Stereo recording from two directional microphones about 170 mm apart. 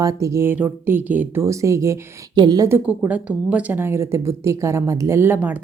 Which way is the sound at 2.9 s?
10° right (ahead or behind).